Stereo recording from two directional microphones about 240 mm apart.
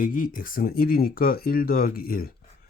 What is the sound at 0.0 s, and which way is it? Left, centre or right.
Speech, left.